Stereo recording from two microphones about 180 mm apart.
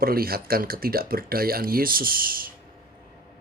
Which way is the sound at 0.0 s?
55° right (ahead or behind).